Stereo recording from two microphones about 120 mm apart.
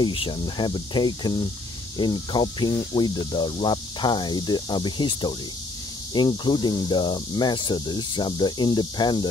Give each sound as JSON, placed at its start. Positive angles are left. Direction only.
{"t": 0.0, "sound": "speech", "side_deg": 45}